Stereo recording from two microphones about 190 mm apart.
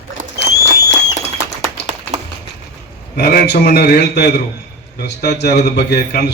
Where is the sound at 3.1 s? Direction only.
50° left (ahead or behind).